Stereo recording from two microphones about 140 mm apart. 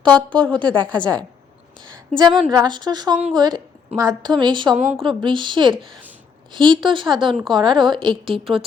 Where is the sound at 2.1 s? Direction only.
30° right (ahead or behind).